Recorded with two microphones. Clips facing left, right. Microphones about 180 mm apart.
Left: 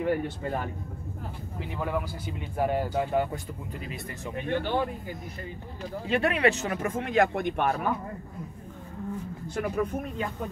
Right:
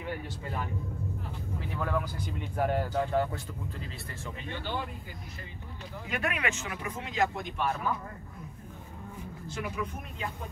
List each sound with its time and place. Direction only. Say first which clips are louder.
0.0 s speech: left 10 dB; 50° left (ahead or behind)
1.8 s speech: left 2 dB; 10° left (ahead or behind)
4.4 s speech: left 9 dB; 60° left (ahead or behind)
6.0 s speech: left 9 dB; 30° left (ahead or behind); by 7.7 s 60° left (ahead or behind)
9.5 s speech: left 7 dB; 50° left (ahead or behind)